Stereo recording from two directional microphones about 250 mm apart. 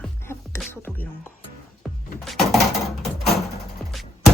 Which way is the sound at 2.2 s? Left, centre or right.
Centre.